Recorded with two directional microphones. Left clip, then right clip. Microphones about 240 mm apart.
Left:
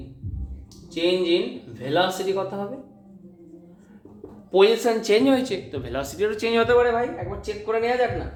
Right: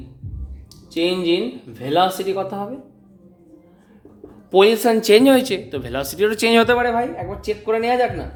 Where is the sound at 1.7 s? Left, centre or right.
Right.